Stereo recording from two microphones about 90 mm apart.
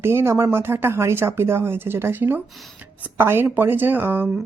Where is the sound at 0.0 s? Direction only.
25° right (ahead or behind).